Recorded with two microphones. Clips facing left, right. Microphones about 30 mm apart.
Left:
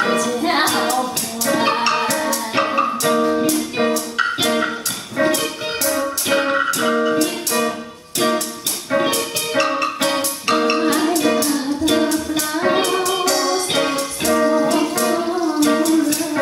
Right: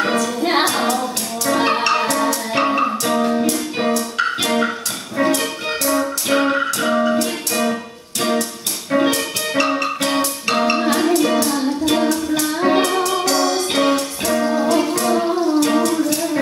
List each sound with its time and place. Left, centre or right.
0.0 s music: centre